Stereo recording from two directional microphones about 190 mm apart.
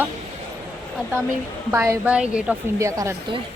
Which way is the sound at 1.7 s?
15° right (ahead or behind).